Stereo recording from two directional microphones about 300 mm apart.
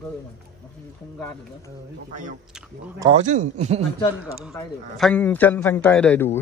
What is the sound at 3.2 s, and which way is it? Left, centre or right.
Speech, right.